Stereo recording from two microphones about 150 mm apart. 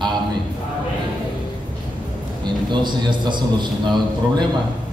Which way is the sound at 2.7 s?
30° right (ahead or behind).